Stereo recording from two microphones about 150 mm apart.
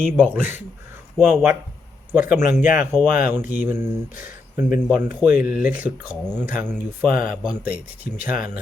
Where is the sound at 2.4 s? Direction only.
55° left (ahead or behind).